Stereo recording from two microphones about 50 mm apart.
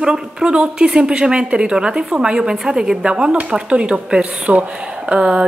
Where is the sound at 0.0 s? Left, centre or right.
Centre.